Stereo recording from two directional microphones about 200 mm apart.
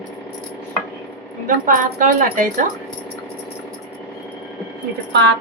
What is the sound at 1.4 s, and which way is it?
A woman's voice, 40° right (ahead or behind).